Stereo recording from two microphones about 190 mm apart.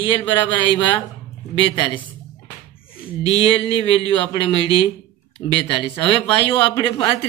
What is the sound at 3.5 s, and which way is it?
Speech, 30° left (ahead or behind).